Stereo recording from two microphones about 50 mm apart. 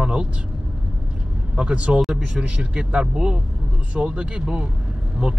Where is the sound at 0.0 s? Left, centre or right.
Centre.